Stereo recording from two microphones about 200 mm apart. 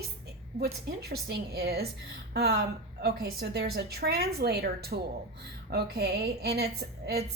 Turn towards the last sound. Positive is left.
turn(degrees=-55)  # may be behind; listen again after turning